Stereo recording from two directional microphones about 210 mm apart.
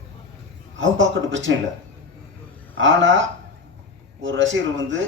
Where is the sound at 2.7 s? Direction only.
60° right (ahead or behind).